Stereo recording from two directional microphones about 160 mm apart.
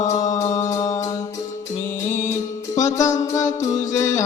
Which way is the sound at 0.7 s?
20° left (ahead or behind).